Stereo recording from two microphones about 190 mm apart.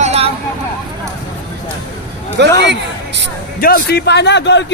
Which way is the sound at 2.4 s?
65° right (ahead or behind).